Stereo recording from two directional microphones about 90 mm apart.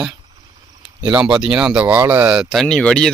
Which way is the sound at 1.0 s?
10° right (ahead or behind).